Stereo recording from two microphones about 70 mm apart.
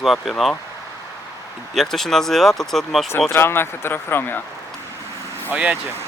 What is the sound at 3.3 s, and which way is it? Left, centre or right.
Speech, left.